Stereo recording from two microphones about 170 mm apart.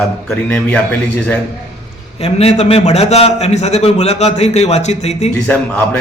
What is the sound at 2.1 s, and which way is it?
A man's voice, 40° left (ahead or behind).